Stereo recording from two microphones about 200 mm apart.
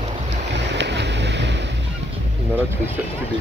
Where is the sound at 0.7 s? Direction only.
60° right (ahead or behind).